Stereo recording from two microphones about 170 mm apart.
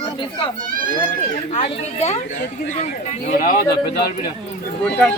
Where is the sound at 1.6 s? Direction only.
40° left (ahead or behind).